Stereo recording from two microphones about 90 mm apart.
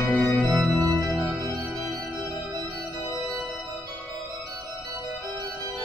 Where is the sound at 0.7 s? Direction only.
40° right (ahead or behind).